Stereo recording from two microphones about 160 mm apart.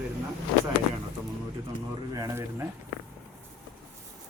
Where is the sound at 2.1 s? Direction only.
20° right (ahead or behind).